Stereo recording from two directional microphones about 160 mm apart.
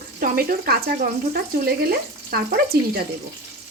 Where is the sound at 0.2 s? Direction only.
70° right (ahead or behind).